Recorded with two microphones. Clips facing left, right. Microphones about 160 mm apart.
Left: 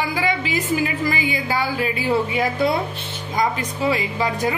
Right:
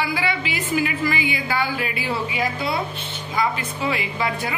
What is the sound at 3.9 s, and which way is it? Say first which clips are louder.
Speech: left 3 dB; 40° left (ahead or behind).